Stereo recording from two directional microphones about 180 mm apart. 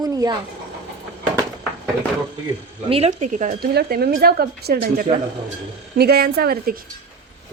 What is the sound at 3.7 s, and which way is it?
A woman's voice, 60° right (ahead or behind).